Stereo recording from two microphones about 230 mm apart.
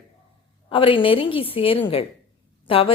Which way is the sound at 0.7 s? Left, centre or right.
Left.